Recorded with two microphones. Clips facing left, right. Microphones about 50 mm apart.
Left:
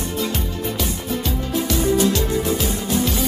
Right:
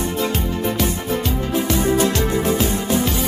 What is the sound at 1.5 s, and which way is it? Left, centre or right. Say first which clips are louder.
Music: right 1 dB; right.